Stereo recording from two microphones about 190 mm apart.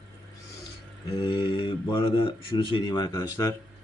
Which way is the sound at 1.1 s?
25° left (ahead or behind).